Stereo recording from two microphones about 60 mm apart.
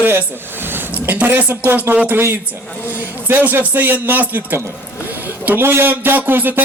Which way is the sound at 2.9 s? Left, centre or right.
Right.